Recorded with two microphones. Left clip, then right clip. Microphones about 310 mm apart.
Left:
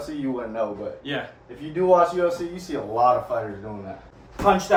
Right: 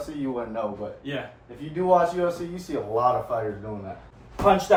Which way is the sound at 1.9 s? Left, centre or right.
Centre.